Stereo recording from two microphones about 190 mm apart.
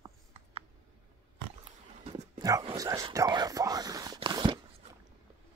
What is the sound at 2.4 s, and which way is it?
Speech, 20° right (ahead or behind).